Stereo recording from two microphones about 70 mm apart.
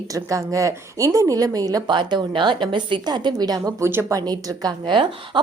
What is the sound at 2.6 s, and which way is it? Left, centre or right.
A woman's voice, right.